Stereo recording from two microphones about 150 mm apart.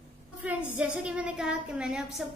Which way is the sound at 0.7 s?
10° right (ahead or behind).